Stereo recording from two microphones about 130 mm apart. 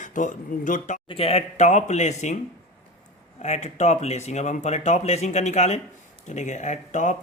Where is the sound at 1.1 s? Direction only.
50° left (ahead or behind).